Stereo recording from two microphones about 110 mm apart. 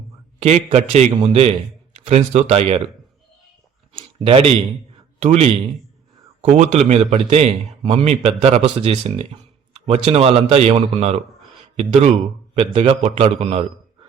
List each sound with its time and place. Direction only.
0.3 s speech: 85° right
1.2 s speech: 70° right (ahead or behind)
2.0 s speech: 80° right
3.9 s a sound: 55° right (ahead or behind)
5.2 s speech: 75° right (ahead or behind)
6.4 s a man's voice: 90° right; by 12.1 s 70° right (ahead or behind)
12.5 s a man's voice: 50° right (ahead or behind)
13.0 s a man's voice: 75° right (ahead or behind)